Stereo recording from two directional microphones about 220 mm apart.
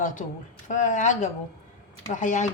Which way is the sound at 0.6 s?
35° left (ahead or behind).